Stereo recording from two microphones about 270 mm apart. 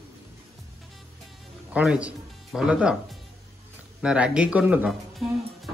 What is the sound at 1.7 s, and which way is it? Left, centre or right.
Speech, centre.